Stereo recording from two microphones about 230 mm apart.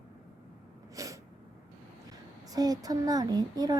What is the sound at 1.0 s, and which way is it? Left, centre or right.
Sneeze, centre.